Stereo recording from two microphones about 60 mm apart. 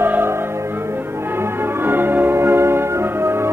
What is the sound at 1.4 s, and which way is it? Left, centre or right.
Music, right.